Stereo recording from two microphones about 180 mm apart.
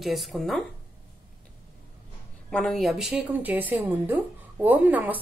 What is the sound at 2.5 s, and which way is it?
A woman's voice, centre (ahead or behind).